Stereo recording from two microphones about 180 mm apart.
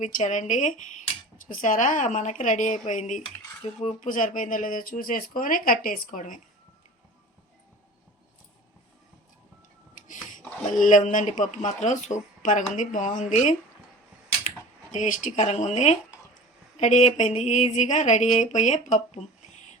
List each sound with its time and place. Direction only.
0.0 s speech: 40° left (ahead or behind)
9.9 s speech: 45° left (ahead or behind)
14.9 s a sound: 45° left (ahead or behind)